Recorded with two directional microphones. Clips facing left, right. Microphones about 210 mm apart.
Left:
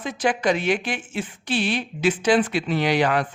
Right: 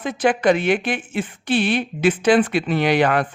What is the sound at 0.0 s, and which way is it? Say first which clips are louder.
Speech: right 4 dB; 55° right (ahead or behind).